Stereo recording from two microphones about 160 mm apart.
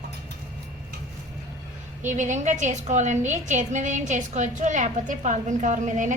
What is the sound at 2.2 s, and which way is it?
A woman's voice, 50° right (ahead or behind).